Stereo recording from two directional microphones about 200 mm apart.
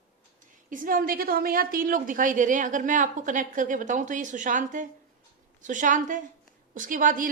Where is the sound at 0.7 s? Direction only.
45° right (ahead or behind).